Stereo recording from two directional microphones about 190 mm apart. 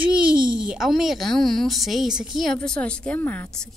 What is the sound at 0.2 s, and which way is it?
A woman's voice, 5° right (ahead or behind).